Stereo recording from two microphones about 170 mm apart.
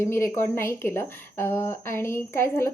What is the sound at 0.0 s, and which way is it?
A woman's voice, 15° left (ahead or behind).